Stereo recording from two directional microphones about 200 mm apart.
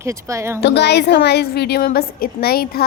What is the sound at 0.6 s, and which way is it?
A woman's voice, 60° left (ahead or behind).